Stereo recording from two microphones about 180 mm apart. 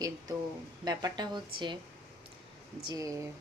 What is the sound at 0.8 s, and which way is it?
Speech, 25° right (ahead or behind).